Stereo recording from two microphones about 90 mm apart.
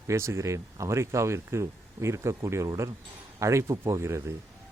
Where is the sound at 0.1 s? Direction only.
35° right (ahead or behind).